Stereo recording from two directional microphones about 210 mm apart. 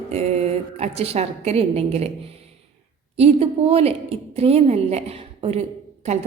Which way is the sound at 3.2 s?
30° right (ahead or behind).